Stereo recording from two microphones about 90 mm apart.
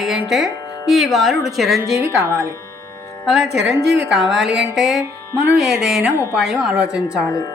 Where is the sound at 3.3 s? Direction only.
5° right (ahead or behind).